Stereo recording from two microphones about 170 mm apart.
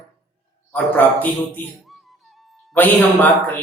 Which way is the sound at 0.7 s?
10° left (ahead or behind).